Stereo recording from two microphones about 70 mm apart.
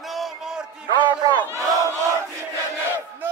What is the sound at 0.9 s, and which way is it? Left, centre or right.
Music, right.